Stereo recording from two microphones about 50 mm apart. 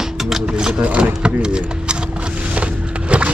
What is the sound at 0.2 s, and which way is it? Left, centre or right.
Music, centre.